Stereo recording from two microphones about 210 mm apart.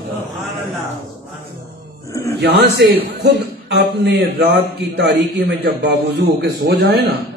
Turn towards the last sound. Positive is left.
turn(degrees=-50)  # may be behind; listen again after turning